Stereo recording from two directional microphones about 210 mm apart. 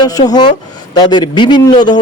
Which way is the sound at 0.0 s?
20° left (ahead or behind).